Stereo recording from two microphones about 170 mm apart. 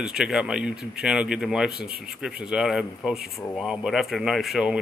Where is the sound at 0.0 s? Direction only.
5° right (ahead or behind).